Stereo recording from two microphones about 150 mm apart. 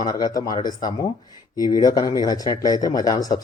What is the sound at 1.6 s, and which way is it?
Speech, 25° left (ahead or behind).